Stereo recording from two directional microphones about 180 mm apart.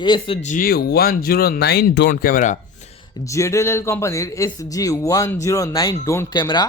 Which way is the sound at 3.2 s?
15° left (ahead or behind).